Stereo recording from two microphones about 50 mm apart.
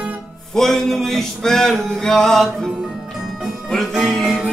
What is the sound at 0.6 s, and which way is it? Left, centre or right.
Male singing, centre.